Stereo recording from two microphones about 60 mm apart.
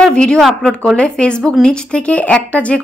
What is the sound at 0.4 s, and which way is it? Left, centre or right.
Speech, centre.